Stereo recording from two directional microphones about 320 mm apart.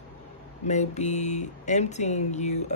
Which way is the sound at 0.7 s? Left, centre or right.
Left.